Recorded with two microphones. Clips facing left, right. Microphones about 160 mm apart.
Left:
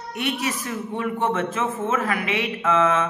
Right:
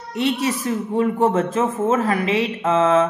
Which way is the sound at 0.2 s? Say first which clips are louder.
Right 6 dB; 30° right (ahead or behind).